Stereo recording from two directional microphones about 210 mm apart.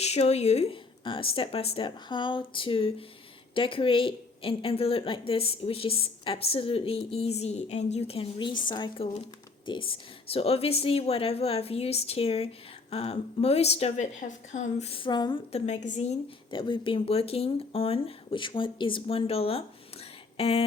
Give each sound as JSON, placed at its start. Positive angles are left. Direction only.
{"t": 0.0, "sound": "speech", "side_deg": 30}